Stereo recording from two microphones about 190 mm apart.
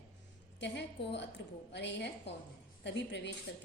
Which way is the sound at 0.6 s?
65° left (ahead or behind).